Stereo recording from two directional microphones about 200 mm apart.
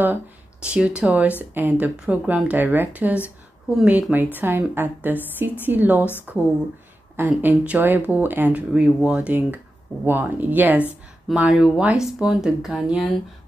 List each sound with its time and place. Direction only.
0.7 s speech: 5° right (ahead or behind)